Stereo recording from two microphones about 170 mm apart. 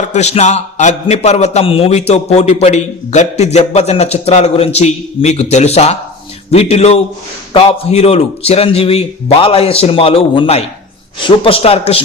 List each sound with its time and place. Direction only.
0.0 s a man's voice: 45° left (ahead or behind)